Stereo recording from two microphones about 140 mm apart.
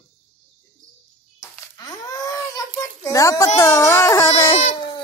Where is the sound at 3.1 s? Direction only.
25° left (ahead or behind).